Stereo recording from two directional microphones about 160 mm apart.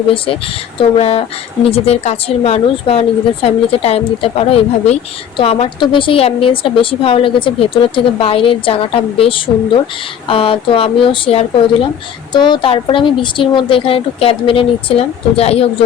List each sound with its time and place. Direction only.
0.1 s a woman's voice: 35° left (ahead or behind)